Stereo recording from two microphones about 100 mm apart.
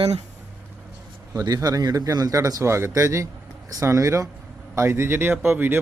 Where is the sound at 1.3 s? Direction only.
40° right (ahead or behind).